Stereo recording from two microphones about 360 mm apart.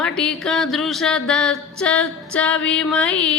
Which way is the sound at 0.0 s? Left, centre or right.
Centre.